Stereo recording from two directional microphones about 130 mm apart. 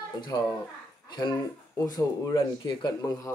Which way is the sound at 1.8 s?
30° left (ahead or behind).